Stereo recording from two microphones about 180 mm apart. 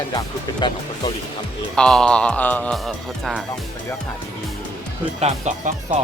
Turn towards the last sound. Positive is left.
turn(degrees=-40)  # may be behind; listen again after turning